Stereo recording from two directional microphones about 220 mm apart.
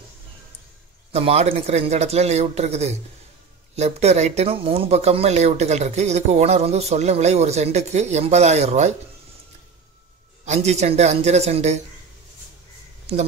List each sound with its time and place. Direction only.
1.1 s speech: 30° right (ahead or behind)
10.4 s speech: 30° right (ahead or behind)